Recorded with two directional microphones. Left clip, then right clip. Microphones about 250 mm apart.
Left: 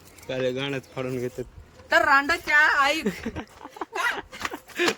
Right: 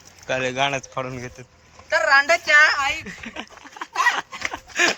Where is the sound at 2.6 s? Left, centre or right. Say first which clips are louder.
Right 3 dB; centre.